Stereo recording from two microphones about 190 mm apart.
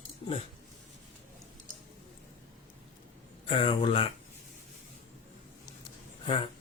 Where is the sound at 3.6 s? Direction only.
30° left (ahead or behind).